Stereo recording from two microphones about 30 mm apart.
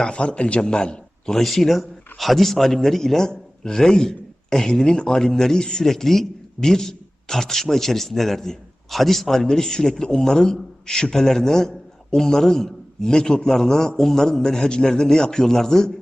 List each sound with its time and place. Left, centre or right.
0.0 s a man's voice: left
1.3 s a man's voice: centre
5.9 s a man's voice: centre
9.5 s a man's voice: left